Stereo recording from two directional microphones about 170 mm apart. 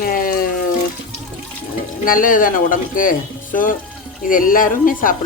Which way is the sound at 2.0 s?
55° left (ahead or behind).